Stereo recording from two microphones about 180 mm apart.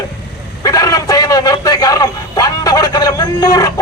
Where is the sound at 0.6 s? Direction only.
20° left (ahead or behind).